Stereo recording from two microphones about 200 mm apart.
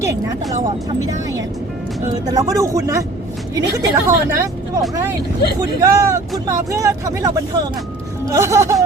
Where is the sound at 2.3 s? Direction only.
15° right (ahead or behind).